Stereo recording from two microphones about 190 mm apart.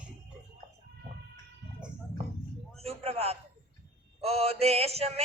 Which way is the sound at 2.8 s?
30° right (ahead or behind).